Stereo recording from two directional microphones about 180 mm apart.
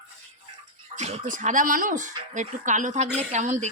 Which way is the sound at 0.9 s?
40° right (ahead or behind).